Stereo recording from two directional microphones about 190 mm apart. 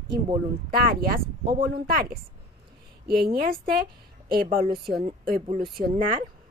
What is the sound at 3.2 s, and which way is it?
A woman's voice, 50° right (ahead or behind).